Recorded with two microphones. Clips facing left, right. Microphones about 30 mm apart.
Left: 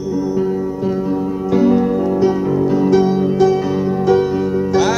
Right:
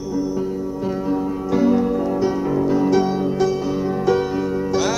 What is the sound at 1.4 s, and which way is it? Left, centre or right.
Music, left.